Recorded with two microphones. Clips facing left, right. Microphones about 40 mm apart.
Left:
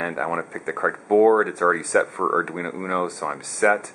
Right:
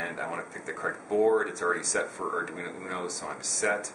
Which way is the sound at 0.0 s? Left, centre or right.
Left.